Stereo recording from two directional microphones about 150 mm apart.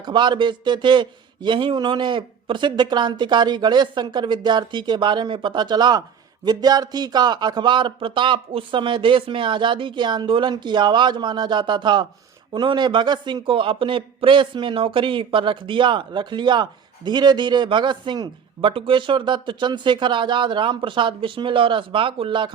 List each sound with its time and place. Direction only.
0.0 s speech: 30° right (ahead or behind)